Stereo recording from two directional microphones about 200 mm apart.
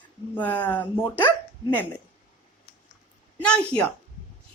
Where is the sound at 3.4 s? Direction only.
5° left (ahead or behind).